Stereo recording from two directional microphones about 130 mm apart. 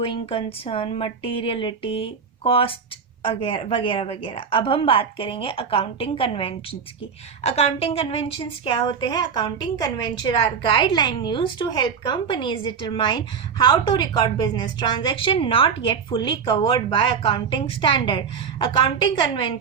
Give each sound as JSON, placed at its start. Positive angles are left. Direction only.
{"t": 0.0, "sound": "a woman's voice", "side_deg": 45}